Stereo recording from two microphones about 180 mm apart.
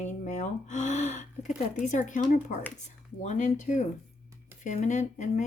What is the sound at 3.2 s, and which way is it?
Speech, 45° left (ahead or behind).